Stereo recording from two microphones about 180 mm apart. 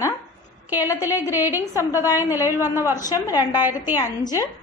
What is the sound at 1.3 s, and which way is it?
A woman's voice, 10° right (ahead or behind).